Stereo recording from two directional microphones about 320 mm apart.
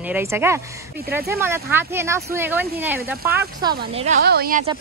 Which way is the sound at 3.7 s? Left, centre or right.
Right.